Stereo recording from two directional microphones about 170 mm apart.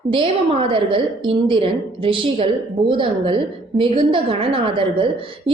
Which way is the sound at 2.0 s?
30° right (ahead or behind).